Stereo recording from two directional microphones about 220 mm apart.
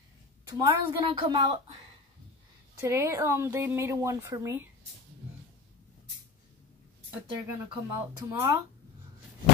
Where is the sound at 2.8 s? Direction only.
10° right (ahead or behind).